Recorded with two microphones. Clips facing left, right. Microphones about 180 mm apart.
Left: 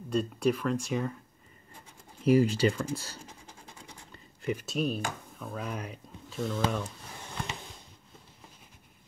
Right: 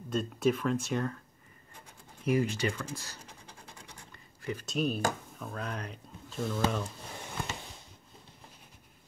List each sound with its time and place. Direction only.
0.1 s speech: centre (ahead or behind)
2.2 s speech: 30° left (ahead or behind)
4.1 s a sound: 20° left (ahead or behind)
4.6 s speech: centre (ahead or behind)